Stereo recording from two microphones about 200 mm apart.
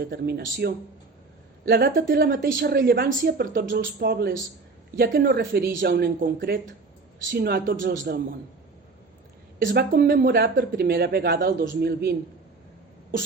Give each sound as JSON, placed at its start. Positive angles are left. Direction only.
{"t": 0.0, "sound": "a woman's voice", "side_deg": -55}
{"t": 9.6, "sound": "a woman's voice", "side_deg": -55}